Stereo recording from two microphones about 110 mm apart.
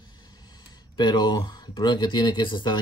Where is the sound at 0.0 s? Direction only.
45° left (ahead or behind).